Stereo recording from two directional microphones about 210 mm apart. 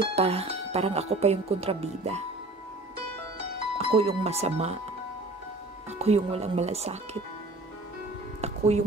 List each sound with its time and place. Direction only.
0.1 s speech: 30° right (ahead or behind)
3.7 s speech: 30° right (ahead or behind)
5.9 s speech: 30° right (ahead or behind)
8.4 s music: 30° right (ahead or behind)